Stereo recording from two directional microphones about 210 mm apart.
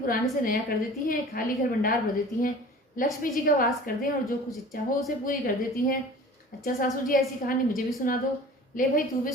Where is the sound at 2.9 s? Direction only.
40° left (ahead or behind).